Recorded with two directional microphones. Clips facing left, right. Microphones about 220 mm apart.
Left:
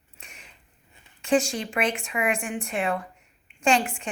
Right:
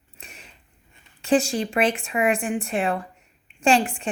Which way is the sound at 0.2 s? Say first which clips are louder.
Right 4 dB; 35° right (ahead or behind).